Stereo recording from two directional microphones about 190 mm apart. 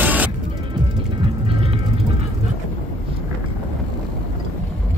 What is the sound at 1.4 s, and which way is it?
Music, 30° right (ahead or behind).